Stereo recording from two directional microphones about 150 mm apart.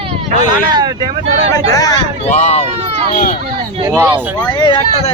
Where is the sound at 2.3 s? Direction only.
50° left (ahead or behind).